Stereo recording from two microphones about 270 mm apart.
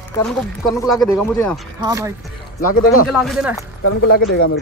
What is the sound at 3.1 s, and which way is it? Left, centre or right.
Speech, centre.